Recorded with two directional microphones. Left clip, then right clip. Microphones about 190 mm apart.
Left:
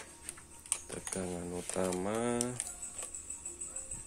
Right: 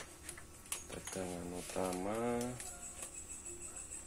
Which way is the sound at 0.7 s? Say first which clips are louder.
Left 5 dB; 40° left (ahead or behind).